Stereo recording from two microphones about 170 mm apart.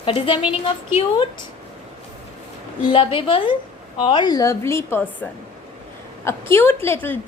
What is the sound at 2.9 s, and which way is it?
A woman's voice, 30° left (ahead or behind).